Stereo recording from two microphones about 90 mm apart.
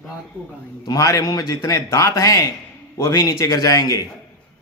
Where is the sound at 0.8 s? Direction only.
40° left (ahead or behind).